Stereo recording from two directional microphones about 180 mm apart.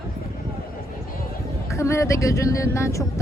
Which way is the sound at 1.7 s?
15° left (ahead or behind).